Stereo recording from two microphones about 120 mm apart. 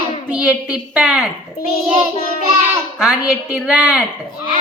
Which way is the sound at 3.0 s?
5° right (ahead or behind).